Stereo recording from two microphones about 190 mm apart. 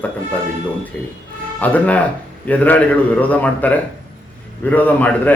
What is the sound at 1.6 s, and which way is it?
Speech, 10° left (ahead or behind).